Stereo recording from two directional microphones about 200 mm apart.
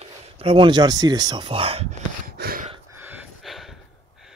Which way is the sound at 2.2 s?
50° right (ahead or behind).